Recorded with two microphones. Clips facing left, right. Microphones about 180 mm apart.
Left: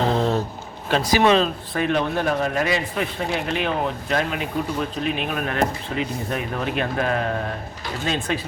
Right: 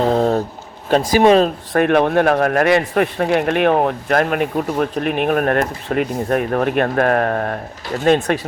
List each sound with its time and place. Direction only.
0.1 s speech: 45° right (ahead or behind)
1.7 s a man's voice: 60° right (ahead or behind)